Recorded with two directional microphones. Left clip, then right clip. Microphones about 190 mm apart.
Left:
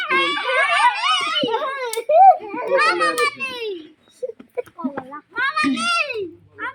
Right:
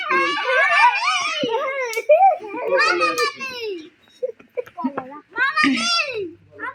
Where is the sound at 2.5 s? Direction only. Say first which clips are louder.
Even; 5° right (ahead or behind).